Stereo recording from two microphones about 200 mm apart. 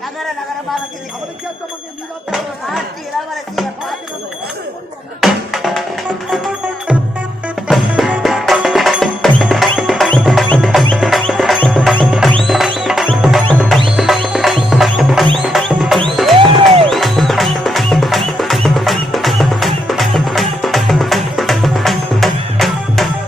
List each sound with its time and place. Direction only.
2.3 s speech: centre (ahead or behind)
5.2 s music: centre (ahead or behind)
16.4 s music: 25° right (ahead or behind)
16.9 s music: centre (ahead or behind)